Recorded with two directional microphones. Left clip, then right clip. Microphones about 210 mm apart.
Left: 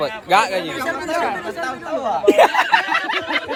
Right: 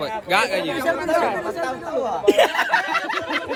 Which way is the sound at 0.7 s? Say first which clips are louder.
Right 1 dB; 30° right (ahead or behind).